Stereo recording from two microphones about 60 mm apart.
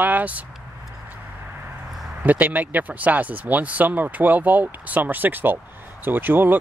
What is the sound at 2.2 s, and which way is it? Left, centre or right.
Speech, right.